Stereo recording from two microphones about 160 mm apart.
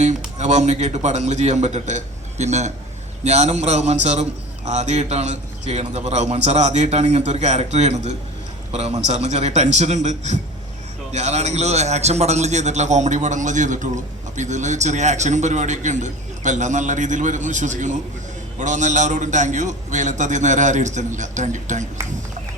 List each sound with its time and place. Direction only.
0.3 s a man's voice: 45° right (ahead or behind)